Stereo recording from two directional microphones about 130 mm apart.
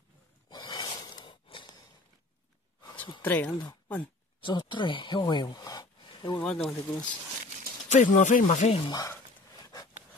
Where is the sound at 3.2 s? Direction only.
15° left (ahead or behind).